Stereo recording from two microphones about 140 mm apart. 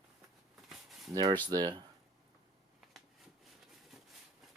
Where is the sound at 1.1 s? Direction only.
30° right (ahead or behind).